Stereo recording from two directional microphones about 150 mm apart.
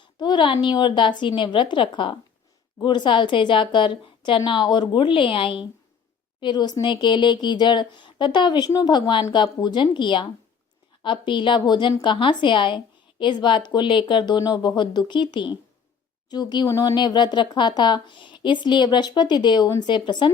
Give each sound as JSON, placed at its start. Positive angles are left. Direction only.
{"t": 0.0, "sound": "a woman's voice", "side_deg": 30}